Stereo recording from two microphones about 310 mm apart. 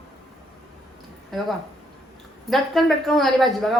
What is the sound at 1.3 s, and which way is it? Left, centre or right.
A woman's voice, centre.